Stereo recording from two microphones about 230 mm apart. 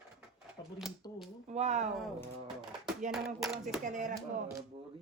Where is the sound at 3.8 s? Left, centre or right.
Right.